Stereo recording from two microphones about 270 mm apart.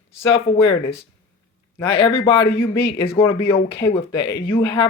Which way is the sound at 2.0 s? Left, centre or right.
Centre.